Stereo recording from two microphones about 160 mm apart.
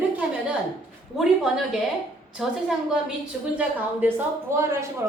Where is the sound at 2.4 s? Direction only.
Centre (ahead or behind).